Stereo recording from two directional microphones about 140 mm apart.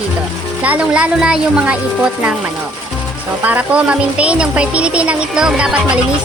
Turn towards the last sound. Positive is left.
turn(degrees=-10)  # may be behind; listen again after turning